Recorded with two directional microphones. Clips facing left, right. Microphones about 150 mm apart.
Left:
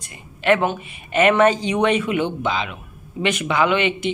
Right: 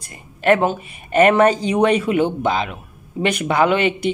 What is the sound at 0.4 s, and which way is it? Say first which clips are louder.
Speech: right 2 dB; 40° right (ahead or behind).